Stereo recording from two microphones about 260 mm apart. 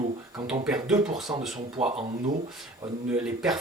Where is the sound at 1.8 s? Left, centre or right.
Right.